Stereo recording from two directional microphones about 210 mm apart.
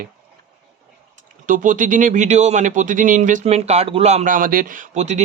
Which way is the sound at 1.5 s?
40° right (ahead or behind).